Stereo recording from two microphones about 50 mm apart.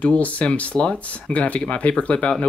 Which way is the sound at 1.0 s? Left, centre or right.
Left.